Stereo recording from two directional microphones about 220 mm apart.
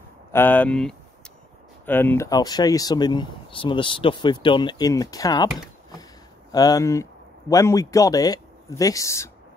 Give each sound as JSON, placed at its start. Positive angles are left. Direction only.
{"t": 0.3, "sound": "speech", "side_deg": 10}
{"t": 6.5, "sound": "a man's voice", "side_deg": 15}